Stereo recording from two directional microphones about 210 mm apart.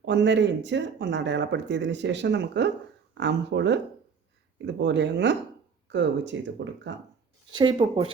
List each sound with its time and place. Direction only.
0.0 s speech: 55° right (ahead or behind)
7.5 s speech: 20° right (ahead or behind)